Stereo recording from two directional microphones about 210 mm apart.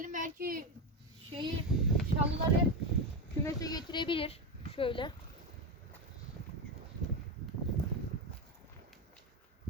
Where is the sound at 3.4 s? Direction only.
20° left (ahead or behind).